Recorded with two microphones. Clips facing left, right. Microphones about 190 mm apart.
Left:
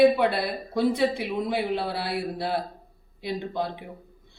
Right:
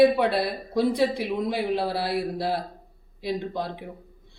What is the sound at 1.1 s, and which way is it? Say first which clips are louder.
Speech: right 1 dB; 55° left (ahead or behind).